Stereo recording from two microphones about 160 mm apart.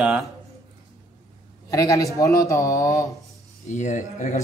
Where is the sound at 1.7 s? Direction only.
20° left (ahead or behind).